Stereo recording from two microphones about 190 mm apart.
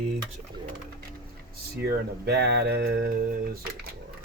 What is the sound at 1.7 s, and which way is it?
Speech, 60° right (ahead or behind).